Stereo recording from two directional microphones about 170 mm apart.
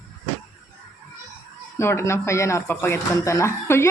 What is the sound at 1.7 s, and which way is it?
A woman's voice, 15° left (ahead or behind).